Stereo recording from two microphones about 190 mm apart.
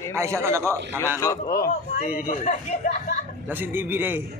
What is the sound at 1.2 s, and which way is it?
Speech, 15° left (ahead or behind).